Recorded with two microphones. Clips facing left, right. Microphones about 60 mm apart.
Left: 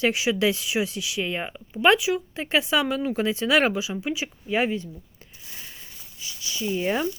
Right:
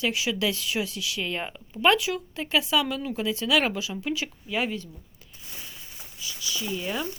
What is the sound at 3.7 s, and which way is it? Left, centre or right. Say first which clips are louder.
Speech: left 2 dB; centre.